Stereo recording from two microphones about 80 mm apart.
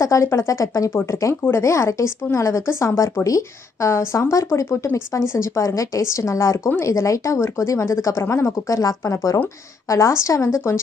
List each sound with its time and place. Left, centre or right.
0.0 s a woman's voice: left